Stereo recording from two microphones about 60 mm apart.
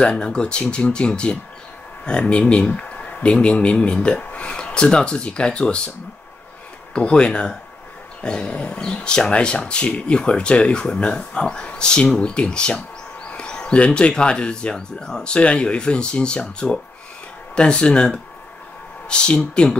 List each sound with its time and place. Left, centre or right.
0.0 s speech: centre